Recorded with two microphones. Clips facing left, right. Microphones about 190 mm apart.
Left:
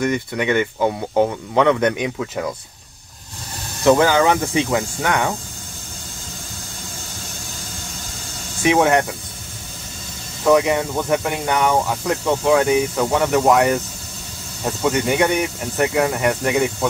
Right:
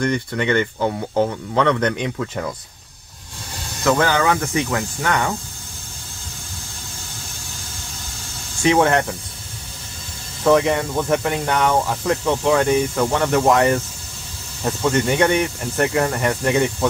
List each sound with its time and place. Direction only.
0.0 s speech: 10° left (ahead or behind)
3.8 s speech: 15° left (ahead or behind)
4.7 s speech: 5° left (ahead or behind)
8.6 s speech: 5° left (ahead or behind)
10.4 s speech: 5° left (ahead or behind)